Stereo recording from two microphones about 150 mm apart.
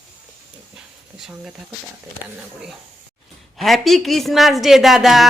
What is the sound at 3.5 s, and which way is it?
A woman's voice, centre (ahead or behind).